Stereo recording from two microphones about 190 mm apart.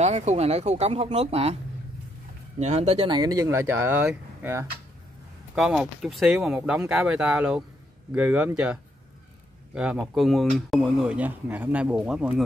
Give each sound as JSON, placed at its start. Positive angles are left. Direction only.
{"t": 0.0, "sound": "speech", "side_deg": -35}
{"t": 2.6, "sound": "speech", "side_deg": -35}
{"t": 9.8, "sound": "speech", "side_deg": -5}